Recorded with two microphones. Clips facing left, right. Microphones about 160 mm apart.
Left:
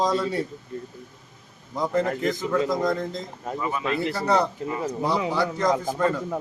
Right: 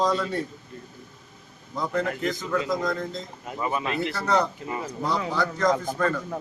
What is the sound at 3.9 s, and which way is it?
Speech, 30° left (ahead or behind).